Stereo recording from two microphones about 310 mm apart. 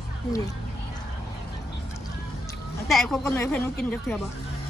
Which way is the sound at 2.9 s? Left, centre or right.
Centre.